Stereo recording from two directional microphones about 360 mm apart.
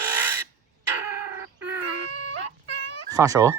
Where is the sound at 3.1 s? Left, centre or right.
Centre.